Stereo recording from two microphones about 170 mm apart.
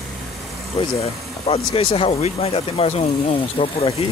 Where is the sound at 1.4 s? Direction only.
35° left (ahead or behind).